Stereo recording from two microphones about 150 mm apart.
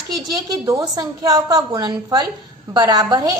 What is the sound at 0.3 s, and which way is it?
A woman's voice, 25° right (ahead or behind).